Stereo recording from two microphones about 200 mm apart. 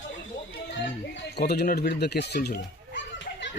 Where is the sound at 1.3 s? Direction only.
50° left (ahead or behind).